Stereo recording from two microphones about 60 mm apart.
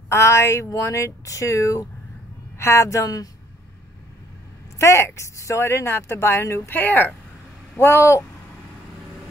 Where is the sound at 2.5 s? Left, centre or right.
Left.